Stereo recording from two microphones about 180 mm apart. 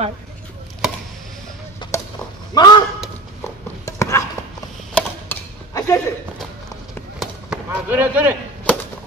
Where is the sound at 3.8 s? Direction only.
15° left (ahead or behind).